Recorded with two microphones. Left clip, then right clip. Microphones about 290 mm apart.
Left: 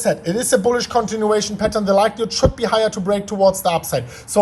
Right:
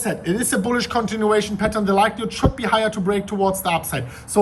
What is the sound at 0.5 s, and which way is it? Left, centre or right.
A man's voice, centre.